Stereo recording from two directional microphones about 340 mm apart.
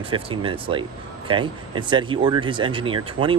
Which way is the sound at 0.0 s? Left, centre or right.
Centre.